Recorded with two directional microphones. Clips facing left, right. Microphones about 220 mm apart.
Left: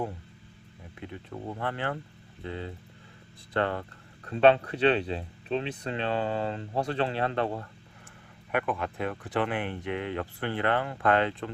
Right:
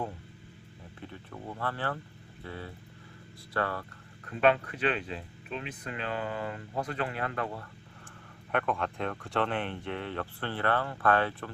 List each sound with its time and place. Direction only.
0.9 s speech: 15° left (ahead or behind)
8.5 s speech: 5° left (ahead or behind)